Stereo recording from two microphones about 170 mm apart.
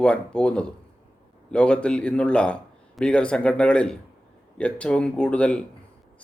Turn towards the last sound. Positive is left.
turn(degrees=5)  # may be behind; listen again after turning